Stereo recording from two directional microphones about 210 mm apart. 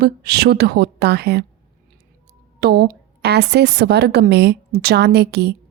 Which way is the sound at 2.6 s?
50° right (ahead or behind).